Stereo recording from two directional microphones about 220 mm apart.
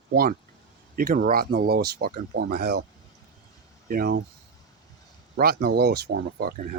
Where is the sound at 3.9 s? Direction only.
45° right (ahead or behind).